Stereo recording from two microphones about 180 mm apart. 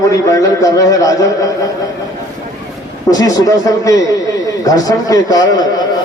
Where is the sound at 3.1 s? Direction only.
20° left (ahead or behind).